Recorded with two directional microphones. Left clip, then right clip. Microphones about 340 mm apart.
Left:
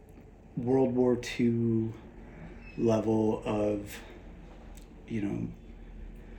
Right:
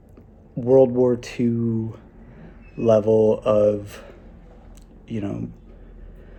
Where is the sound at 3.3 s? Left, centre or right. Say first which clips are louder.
Right 12 dB; right.